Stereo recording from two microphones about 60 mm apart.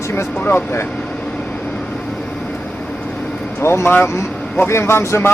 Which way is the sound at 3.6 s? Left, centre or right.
Left.